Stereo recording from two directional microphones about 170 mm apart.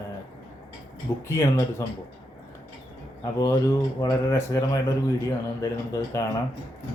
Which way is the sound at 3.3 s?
20° left (ahead or behind).